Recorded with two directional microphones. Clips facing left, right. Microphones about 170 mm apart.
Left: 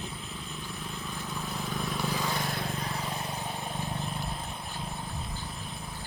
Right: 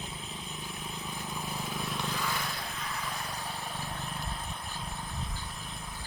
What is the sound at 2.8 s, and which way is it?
Vehicle, 30° left (ahead or behind).